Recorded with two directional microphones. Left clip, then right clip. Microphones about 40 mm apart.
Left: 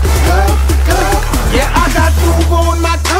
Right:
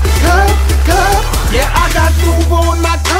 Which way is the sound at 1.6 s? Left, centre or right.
Centre.